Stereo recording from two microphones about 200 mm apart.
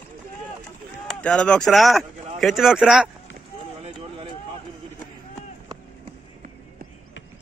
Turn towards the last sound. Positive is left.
turn(degrees=-35)  # may be behind; listen again after turning